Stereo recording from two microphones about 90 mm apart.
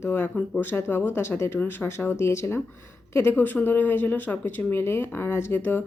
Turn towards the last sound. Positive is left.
turn(degrees=25)  # may be behind; listen again after turning